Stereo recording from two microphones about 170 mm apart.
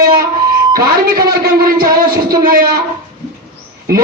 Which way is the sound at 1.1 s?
60° right (ahead or behind).